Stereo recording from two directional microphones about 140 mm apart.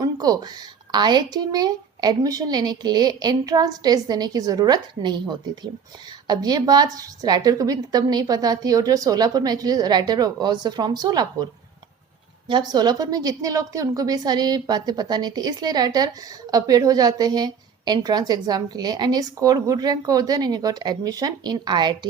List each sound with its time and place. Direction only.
0.0 s a woman's voice: 25° right (ahead or behind)
12.5 s a woman's voice: 30° right (ahead or behind)